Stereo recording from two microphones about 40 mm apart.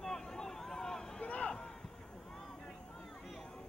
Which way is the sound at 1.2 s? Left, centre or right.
Left.